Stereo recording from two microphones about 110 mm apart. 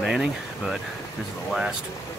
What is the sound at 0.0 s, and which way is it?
Speech, 5° right (ahead or behind).